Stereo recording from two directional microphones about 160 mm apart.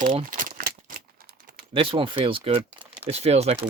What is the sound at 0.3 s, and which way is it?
Crumpling, 55° right (ahead or behind).